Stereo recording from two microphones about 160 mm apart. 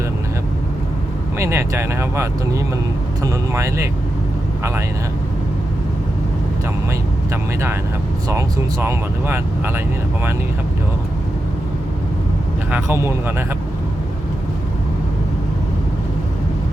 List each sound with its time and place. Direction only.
1.4 s speech: 15° right (ahead or behind)
3.5 s speech: 20° right (ahead or behind)
7.3 s speech: 15° right (ahead or behind)
12.7 s speech: 15° right (ahead or behind)